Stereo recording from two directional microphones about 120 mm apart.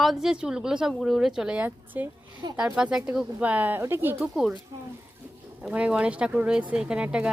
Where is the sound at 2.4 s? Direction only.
35° right (ahead or behind).